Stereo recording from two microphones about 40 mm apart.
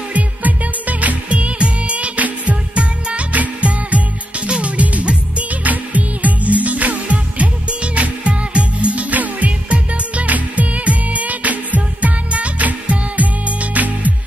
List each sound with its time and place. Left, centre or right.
0.1 s music: right
1.3 s music: right
2.7 s music: right
9.1 s music: right